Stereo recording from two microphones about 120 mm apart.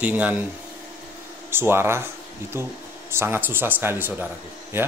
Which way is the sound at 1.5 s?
20° right (ahead or behind).